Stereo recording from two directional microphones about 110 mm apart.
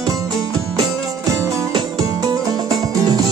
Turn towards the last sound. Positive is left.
turn(degrees=-35)  # may be behind; listen again after turning